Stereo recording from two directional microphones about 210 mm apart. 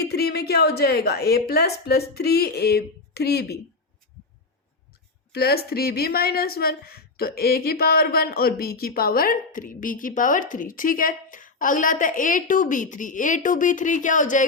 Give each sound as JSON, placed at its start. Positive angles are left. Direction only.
{"t": 0.0, "sound": "a woman's voice", "side_deg": 50}
{"t": 5.3, "sound": "a woman's voice", "side_deg": 50}